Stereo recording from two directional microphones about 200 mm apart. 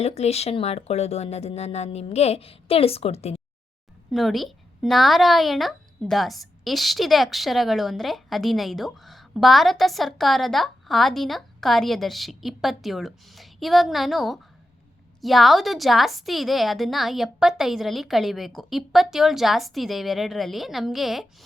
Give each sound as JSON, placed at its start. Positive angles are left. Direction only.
{"t": 0.0, "sound": "speech", "side_deg": 30}
{"t": 4.1, "sound": "a woman's voice", "side_deg": 0}